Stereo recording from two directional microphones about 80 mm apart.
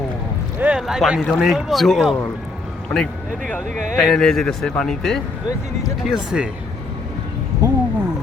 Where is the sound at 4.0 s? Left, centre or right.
Centre.